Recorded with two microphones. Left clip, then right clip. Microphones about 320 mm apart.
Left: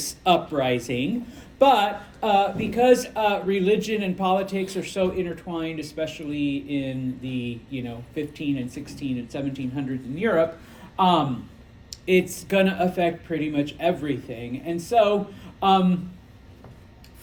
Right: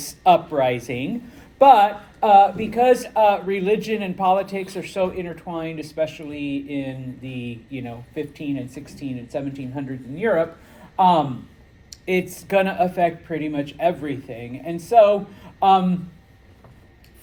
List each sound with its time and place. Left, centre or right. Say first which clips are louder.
0.0 s speech: right 5 dB; centre
11.9 s a sound: left 2 dB; centre
12.3 s speech: right 2 dB; centre